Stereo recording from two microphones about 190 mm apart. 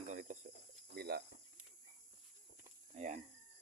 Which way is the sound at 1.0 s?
55° right (ahead or behind).